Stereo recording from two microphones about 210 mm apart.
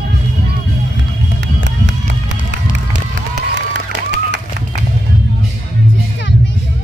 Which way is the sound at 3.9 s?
55° right (ahead or behind).